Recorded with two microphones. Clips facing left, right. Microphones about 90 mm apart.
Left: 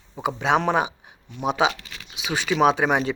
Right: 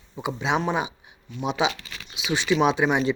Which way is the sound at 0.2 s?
45° left (ahead or behind).